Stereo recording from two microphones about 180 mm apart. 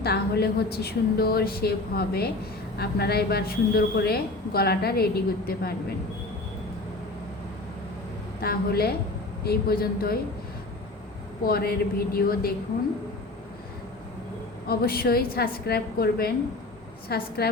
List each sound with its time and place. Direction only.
0.0 s a woman's voice: 60° left (ahead or behind)
8.4 s a woman's voice: 60° left (ahead or behind)
11.4 s a woman's voice: 60° left (ahead or behind)
14.7 s a woman's voice: 60° left (ahead or behind)